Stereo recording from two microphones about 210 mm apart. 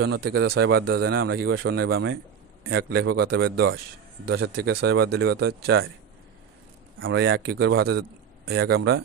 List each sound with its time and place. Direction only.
0.0 s speech: 50° right (ahead or behind)
7.0 s speech: 65° right (ahead or behind)